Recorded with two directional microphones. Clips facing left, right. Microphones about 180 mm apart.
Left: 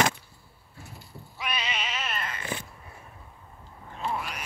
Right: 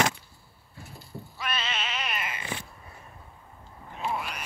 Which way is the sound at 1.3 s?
15° left (ahead or behind).